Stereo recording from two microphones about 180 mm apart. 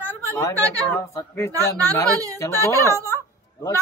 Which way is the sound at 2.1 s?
20° right (ahead or behind).